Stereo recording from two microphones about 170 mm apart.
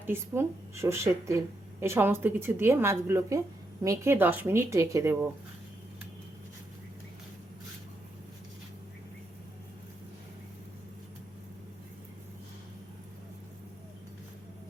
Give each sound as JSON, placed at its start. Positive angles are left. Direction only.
{"t": 0.0, "sound": "a woman's voice", "side_deg": -15}